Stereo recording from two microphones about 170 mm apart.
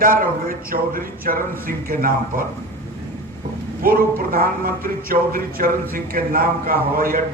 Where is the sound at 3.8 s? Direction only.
60° right (ahead or behind).